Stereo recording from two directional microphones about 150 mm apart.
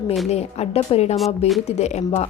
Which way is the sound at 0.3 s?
45° left (ahead or behind).